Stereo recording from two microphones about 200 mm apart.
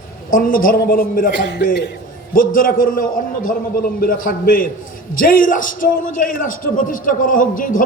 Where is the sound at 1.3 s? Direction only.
60° left (ahead or behind).